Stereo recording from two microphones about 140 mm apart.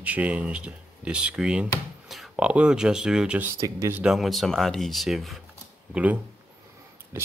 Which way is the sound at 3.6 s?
20° right (ahead or behind).